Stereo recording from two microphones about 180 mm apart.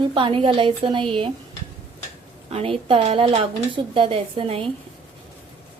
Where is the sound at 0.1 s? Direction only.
30° right (ahead or behind).